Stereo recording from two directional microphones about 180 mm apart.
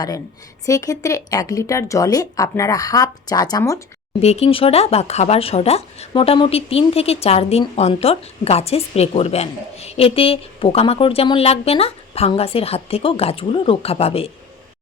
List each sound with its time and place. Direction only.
0.6 s speech: 20° left (ahead or behind)
4.2 s speech: 35° left (ahead or behind)